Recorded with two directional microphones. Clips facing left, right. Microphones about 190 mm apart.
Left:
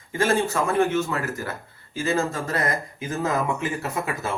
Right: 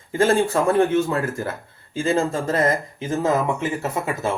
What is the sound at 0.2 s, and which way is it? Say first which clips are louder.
Speech: right 4 dB; 30° right (ahead or behind).